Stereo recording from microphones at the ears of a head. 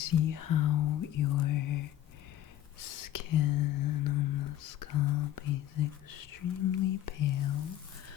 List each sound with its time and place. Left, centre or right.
0.0 s whispering: left